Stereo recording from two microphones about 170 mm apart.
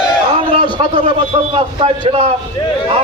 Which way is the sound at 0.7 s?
30° right (ahead or behind).